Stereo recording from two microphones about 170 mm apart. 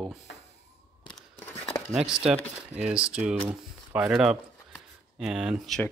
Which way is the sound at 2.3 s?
5° right (ahead or behind).